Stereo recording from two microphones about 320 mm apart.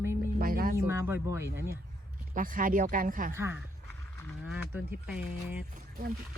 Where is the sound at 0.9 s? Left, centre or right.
Centre.